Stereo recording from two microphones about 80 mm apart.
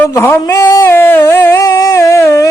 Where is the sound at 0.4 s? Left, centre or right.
Left.